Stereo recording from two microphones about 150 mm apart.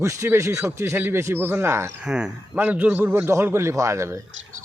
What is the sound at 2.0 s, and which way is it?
A man's voice, 5° right (ahead or behind).